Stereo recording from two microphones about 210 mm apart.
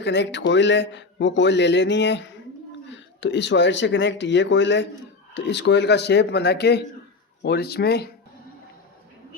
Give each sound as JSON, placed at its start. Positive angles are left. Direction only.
{"t": 0.0, "sound": "a man's voice", "side_deg": 55}